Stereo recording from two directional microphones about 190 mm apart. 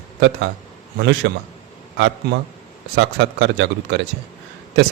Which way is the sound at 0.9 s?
65° right (ahead or behind).